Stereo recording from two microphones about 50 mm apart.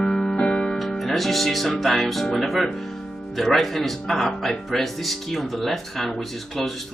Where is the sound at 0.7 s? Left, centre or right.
Centre.